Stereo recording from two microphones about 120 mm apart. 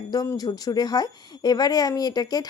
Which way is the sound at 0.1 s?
30° left (ahead or behind).